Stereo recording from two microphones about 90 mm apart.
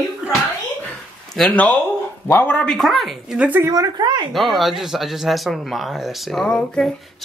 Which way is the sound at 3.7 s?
50° right (ahead or behind).